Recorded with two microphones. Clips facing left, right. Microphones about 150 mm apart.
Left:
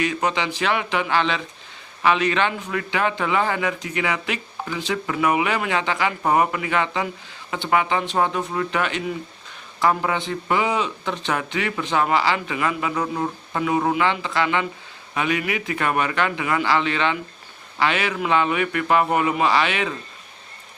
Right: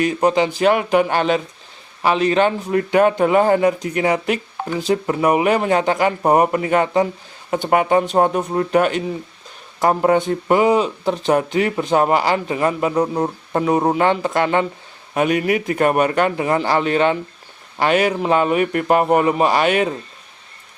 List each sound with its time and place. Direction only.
0.0 s a man's voice: 40° right (ahead or behind)